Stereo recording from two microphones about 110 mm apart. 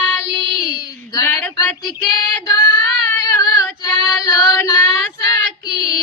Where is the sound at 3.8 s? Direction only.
35° left (ahead or behind).